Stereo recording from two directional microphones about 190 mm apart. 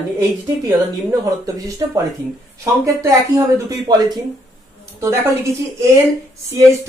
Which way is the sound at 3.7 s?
20° right (ahead or behind).